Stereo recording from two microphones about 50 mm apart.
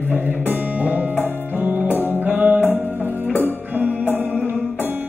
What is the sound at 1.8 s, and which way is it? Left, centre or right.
Music, left.